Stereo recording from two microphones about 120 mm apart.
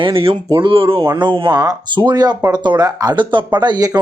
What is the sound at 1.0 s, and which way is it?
Speech, 40° right (ahead or behind).